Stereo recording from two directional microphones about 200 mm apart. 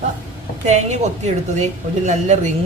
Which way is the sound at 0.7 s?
35° right (ahead or behind).